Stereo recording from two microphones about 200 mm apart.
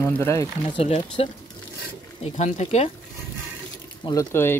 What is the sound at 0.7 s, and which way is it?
Speech, 30° left (ahead or behind).